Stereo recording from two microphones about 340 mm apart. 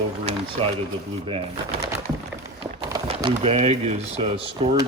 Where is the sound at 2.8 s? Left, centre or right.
Centre.